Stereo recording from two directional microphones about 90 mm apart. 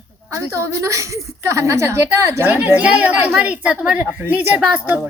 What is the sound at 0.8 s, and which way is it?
A woman's voice, 35° right (ahead or behind).